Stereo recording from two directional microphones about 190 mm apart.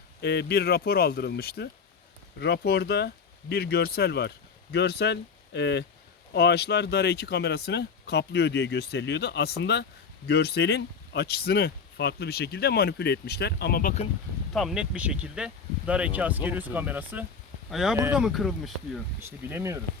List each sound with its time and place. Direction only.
0.2 s speech: 60° left (ahead or behind)
14.5 s speech: centre (ahead or behind)
19.5 s speech: 15° right (ahead or behind)